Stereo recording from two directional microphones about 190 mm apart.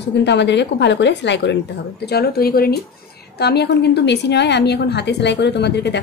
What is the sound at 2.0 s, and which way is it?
A woman's voice, 55° left (ahead or behind).